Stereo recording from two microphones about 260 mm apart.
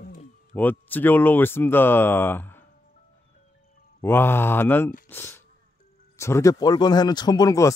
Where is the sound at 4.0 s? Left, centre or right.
Centre.